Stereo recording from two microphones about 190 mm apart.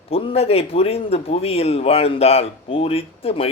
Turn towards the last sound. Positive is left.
turn(degrees=30)  # may be behind; listen again after turning